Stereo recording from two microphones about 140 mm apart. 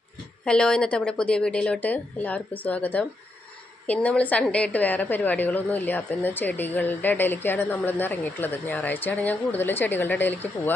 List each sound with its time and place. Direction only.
0.5 s a woman's voice: 5° left (ahead or behind)